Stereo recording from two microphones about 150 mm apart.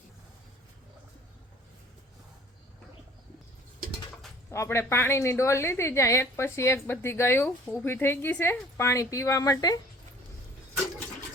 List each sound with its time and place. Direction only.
4.5 s a woman's voice: 20° left (ahead or behind)
7.4 s speech: 5° left (ahead or behind)
7.9 s a woman's voice: 15° left (ahead or behind)